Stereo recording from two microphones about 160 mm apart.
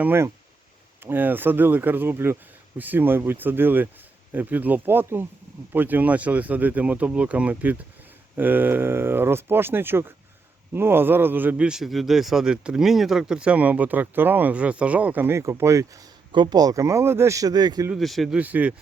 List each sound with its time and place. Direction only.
0.0 s a man's voice: 15° right (ahead or behind)
17.9 s speech: centre (ahead or behind)